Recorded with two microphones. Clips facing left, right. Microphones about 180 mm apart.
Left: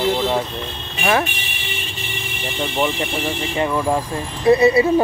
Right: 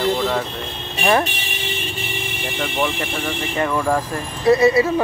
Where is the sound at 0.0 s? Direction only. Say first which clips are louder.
Left 1 dB; 15° left (ahead or behind).